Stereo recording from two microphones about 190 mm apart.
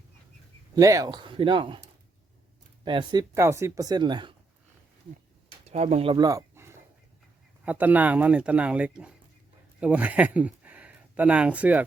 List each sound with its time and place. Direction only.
0.8 s speech: 15° right (ahead or behind)
2.8 s speech: 25° right (ahead or behind)
5.6 s speech: 35° right (ahead or behind); by 11.8 s 5° right (ahead or behind)